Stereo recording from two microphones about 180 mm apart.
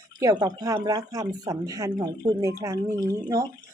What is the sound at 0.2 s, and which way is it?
Speech, 20° right (ahead or behind).